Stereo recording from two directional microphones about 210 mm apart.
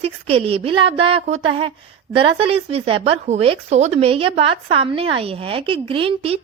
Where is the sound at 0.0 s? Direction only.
25° right (ahead or behind).